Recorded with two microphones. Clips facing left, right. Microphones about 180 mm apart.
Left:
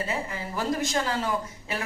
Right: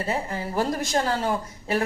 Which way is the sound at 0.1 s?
40° right (ahead or behind).